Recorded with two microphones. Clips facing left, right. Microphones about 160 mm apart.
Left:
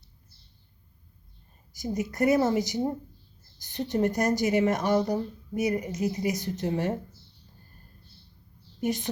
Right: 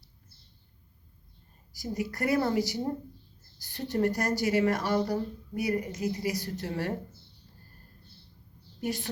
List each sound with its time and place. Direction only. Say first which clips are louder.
1.7 s speech: left 3 dB; 20° left (ahead or behind)
8.8 s a woman's voice: left 4 dB; 20° left (ahead or behind)